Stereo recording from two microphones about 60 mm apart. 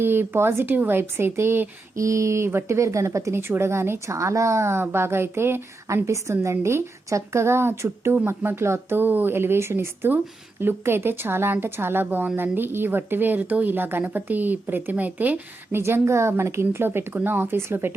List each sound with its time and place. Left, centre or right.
0.0 s a woman's voice: right
2.0 s speech: right
3.3 s speech: right
5.9 s speech: right
6.3 s a woman's voice: right
9.0 s a woman's voice: right
15.8 s a woman's voice: right